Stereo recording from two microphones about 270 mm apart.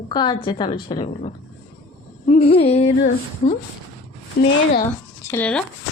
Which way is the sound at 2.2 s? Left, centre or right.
Left.